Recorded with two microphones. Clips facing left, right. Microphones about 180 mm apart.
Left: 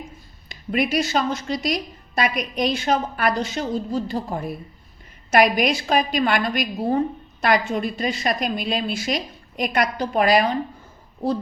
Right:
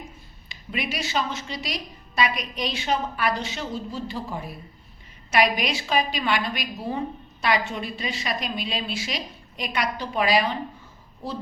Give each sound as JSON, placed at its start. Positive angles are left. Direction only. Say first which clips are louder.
{"t": 0.4, "sound": "a woman's voice", "louder": "left 8 dB", "side_deg": 45}